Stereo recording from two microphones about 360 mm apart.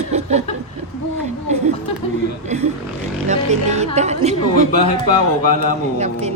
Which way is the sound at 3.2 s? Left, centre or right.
Centre.